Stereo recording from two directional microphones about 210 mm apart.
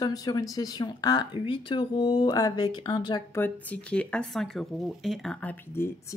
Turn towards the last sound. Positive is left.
turn(degrees=10)  # may be behind; listen again after turning